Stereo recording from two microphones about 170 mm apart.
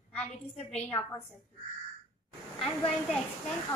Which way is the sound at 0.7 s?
10° left (ahead or behind).